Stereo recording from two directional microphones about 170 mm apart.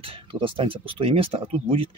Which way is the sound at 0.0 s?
30° right (ahead or behind).